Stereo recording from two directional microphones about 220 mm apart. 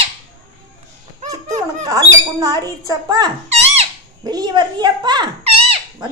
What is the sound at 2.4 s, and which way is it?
A child's voice, 15° right (ahead or behind).